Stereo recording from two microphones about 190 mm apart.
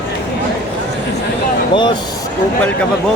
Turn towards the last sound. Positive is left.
turn(degrees=25)  # may be behind; listen again after turning